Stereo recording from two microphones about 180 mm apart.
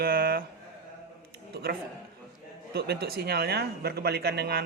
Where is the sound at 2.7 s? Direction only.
65° right (ahead or behind).